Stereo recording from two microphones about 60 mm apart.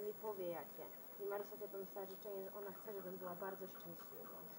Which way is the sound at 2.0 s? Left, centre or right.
Centre.